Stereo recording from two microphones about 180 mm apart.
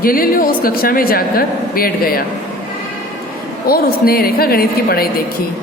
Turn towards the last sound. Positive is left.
turn(degrees=55)  # may be behind; listen again after turning